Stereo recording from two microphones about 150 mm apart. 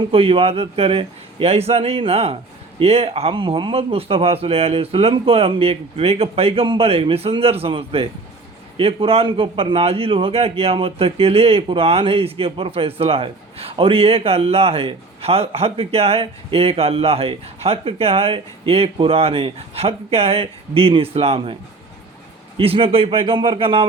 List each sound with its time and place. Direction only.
0.1 s a man's voice: 40° right (ahead or behind)
22.5 s a man's voice: 40° right (ahead or behind)